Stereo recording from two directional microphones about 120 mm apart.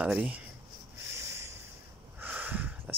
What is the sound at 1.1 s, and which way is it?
Snort, 20° right (ahead or behind).